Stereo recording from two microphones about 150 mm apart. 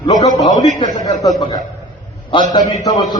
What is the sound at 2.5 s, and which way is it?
Speech, 25° left (ahead or behind).